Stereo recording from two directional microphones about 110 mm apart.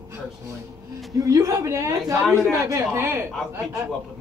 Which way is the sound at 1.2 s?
30° right (ahead or behind).